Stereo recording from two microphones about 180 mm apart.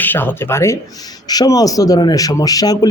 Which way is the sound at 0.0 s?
10° left (ahead or behind).